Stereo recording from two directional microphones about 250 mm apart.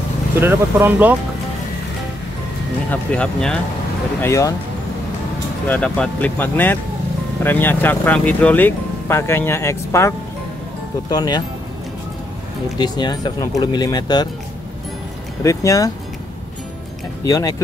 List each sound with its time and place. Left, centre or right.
0.4 s speech: centre
2.9 s speech: centre
5.7 s speech: centre
12.7 s speech: centre
15.4 s speech: centre
17.2 s speech: centre